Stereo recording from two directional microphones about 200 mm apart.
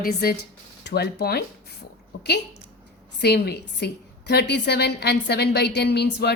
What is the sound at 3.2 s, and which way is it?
A woman's voice, 55° left (ahead or behind).